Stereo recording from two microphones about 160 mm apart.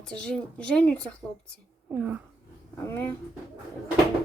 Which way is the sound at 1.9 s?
10° right (ahead or behind).